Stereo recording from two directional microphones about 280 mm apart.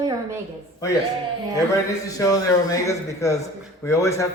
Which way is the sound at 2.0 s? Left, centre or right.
Centre.